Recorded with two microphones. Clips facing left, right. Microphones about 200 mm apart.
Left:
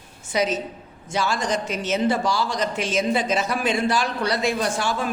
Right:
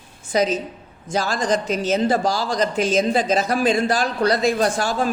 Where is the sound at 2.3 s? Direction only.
90° right.